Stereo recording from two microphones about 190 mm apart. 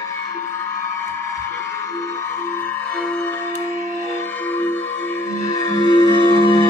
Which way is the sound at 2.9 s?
5° left (ahead or behind).